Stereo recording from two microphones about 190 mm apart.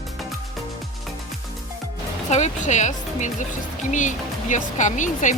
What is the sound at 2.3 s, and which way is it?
Speech, 40° left (ahead or behind).